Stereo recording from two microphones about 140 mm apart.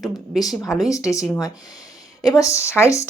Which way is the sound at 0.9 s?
25° left (ahead or behind).